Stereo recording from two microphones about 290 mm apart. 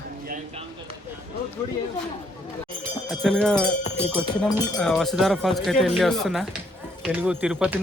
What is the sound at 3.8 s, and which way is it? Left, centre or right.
Speech, left.